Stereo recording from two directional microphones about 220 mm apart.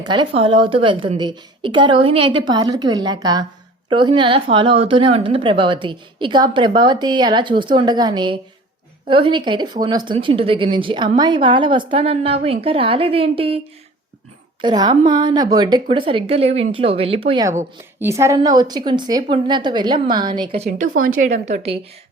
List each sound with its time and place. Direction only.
0.1 s a woman's voice: 25° right (ahead or behind)
14.6 s a woman's voice: 20° right (ahead or behind)
20.7 s a woman's voice: 35° right (ahead or behind)